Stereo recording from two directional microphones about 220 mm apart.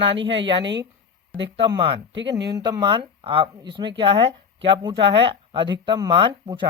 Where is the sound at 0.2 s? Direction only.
55° right (ahead or behind).